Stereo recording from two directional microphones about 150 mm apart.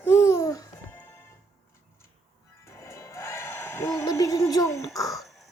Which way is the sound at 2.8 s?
20° left (ahead or behind).